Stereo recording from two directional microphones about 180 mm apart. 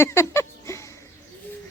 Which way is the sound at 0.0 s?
15° left (ahead or behind).